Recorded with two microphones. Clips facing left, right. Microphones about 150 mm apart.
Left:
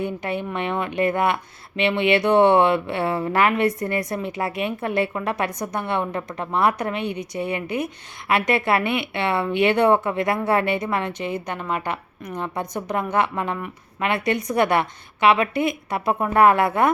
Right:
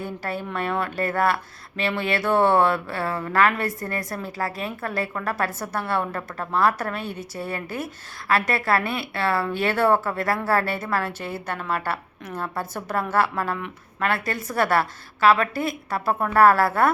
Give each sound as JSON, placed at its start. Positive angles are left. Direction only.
{"t": 0.0, "sound": "a woman's voice", "side_deg": 20}